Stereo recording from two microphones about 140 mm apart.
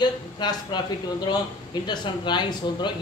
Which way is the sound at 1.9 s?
30° left (ahead or behind).